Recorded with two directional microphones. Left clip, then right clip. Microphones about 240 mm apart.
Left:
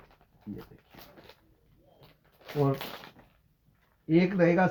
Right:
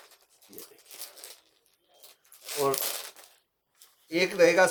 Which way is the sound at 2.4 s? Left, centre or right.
Right.